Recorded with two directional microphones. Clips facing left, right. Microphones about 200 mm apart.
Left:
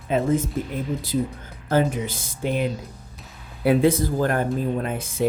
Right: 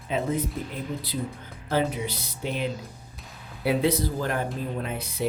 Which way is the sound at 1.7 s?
50° left (ahead or behind).